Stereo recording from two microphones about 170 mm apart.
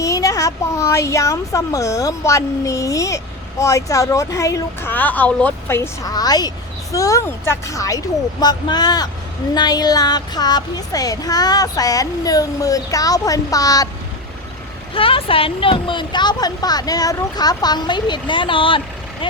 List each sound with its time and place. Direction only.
0.0 s speech: 20° left (ahead or behind)
14.9 s speech: 30° left (ahead or behind)